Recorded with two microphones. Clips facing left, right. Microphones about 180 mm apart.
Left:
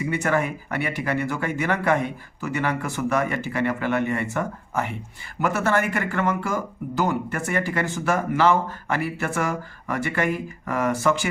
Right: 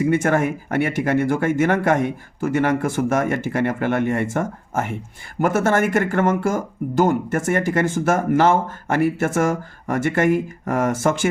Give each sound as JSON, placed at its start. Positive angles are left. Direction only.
{"t": 0.0, "sound": "speech", "side_deg": -50}